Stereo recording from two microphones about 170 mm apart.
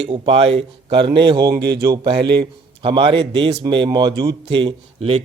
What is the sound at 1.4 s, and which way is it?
Speech, 75° right (ahead or behind).